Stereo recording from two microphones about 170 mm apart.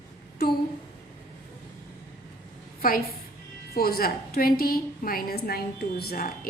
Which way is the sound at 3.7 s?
60° left (ahead or behind).